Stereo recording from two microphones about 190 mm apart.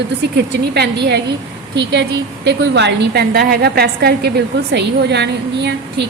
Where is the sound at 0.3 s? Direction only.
60° right (ahead or behind).